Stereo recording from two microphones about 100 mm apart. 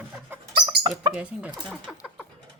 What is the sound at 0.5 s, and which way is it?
Chicken, 45° right (ahead or behind).